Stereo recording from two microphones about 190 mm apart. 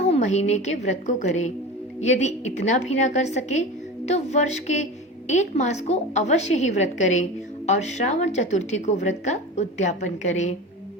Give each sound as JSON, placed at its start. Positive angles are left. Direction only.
{"t": 0.0, "sound": "a woman's voice", "side_deg": 35}